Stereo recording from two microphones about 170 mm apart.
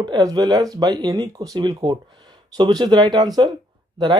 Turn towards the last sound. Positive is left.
turn(degrees=-25)  # may be behind; listen again after turning